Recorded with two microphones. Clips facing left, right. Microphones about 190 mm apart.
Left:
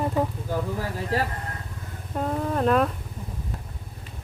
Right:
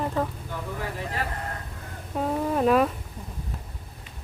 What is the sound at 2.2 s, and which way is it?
Speech, 5° right (ahead or behind).